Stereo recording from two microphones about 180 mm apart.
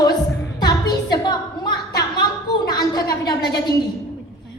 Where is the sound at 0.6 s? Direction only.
25° left (ahead or behind).